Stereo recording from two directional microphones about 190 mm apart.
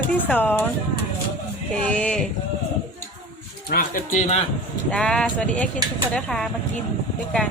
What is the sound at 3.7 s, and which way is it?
Speech, 50° left (ahead or behind).